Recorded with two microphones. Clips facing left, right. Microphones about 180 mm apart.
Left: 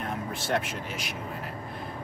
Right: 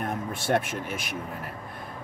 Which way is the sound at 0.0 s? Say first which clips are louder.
Right 2 dB; 50° right (ahead or behind).